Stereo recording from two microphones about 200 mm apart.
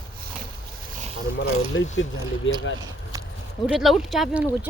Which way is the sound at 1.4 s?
70° left (ahead or behind).